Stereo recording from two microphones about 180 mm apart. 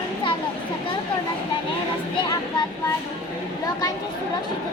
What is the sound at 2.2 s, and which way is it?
Speech, 25° left (ahead or behind).